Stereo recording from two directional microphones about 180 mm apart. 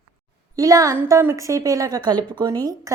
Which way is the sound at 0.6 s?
20° right (ahead or behind).